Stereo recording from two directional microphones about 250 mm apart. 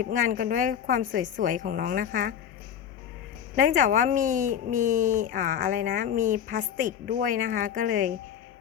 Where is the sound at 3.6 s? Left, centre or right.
Right.